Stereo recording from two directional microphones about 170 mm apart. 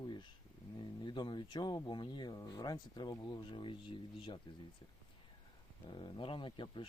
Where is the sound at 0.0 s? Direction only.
25° left (ahead or behind).